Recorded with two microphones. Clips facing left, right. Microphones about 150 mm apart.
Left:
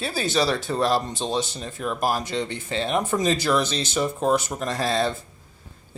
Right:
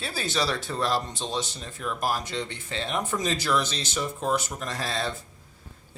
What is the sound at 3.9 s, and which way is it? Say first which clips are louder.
Speech: left 5 dB; 55° left (ahead or behind).